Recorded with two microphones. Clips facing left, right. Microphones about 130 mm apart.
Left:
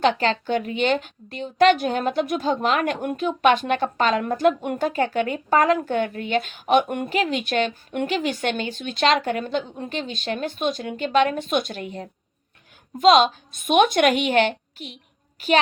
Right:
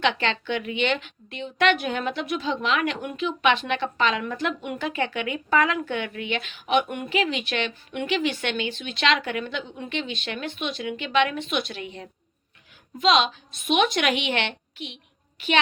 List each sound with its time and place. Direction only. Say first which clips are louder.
0.0 s a woman's voice: left 4 dB; 40° left (ahead or behind)